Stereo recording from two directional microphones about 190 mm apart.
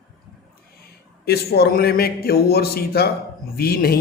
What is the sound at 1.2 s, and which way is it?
Speech, 55° left (ahead or behind).